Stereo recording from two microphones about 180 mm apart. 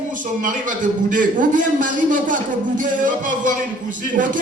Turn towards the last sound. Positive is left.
turn(degrees=-45)  # may be behind; listen again after turning